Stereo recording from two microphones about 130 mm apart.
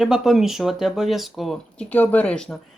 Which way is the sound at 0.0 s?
Centre (ahead or behind).